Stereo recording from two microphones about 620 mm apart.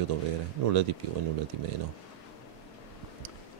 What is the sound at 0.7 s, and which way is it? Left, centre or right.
Speech, right.